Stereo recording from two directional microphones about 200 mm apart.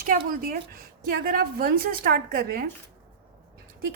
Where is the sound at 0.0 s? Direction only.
45° right (ahead or behind).